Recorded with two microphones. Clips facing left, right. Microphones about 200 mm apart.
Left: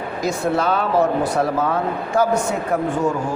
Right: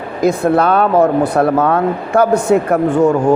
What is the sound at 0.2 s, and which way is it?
Speech, 55° right (ahead or behind).